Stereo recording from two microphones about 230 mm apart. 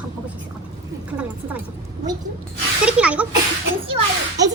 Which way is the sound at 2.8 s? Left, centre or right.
Centre.